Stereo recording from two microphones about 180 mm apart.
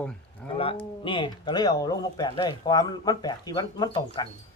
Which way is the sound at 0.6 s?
30° left (ahead or behind).